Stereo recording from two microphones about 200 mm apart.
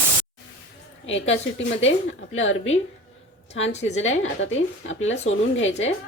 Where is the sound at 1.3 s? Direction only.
70° left (ahead or behind).